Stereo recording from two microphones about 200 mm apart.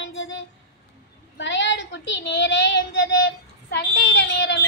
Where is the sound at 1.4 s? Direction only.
65° left (ahead or behind).